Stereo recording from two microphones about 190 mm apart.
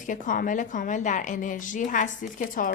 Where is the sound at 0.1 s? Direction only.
45° left (ahead or behind).